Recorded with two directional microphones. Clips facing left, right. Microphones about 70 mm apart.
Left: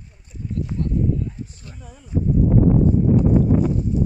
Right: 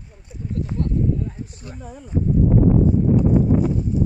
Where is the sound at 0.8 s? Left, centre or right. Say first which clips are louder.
Right 1 dB; right.